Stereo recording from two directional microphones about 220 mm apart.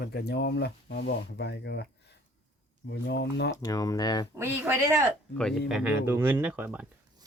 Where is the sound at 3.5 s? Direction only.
15° left (ahead or behind).